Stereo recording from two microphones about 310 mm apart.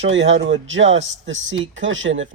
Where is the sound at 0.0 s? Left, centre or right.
Right.